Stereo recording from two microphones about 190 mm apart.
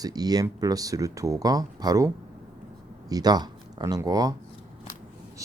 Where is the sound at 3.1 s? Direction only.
20° right (ahead or behind).